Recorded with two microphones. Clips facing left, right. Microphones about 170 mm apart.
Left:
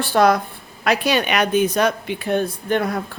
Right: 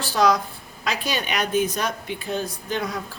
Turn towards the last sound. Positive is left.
turn(degrees=55)  # may be behind; listen again after turning